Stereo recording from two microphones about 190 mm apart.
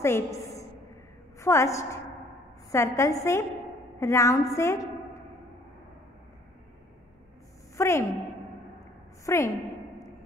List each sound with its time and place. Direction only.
0.0 s a sound: 15° left (ahead or behind)
1.4 s a woman's voice: 15° left (ahead or behind)
7.7 s a woman's voice: 15° left (ahead or behind)
9.2 s a woman's voice: 15° left (ahead or behind)